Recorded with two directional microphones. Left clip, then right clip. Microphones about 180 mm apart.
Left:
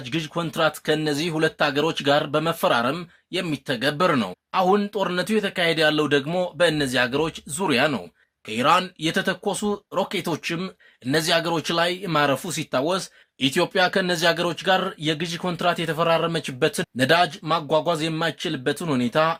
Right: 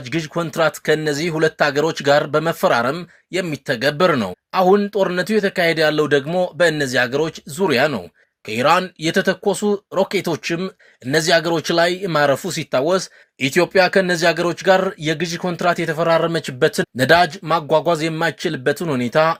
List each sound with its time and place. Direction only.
0.0 s speech: 25° right (ahead or behind)